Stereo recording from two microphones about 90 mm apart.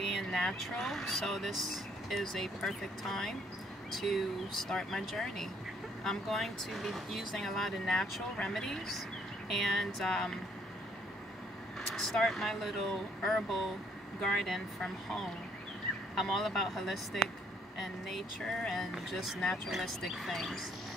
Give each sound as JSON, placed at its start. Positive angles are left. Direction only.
{"t": 0.0, "sound": "speech", "side_deg": 5}
{"t": 11.9, "sound": "speech", "side_deg": 5}